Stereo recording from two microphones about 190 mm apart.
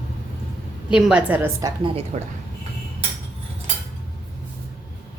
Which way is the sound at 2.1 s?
40° right (ahead or behind).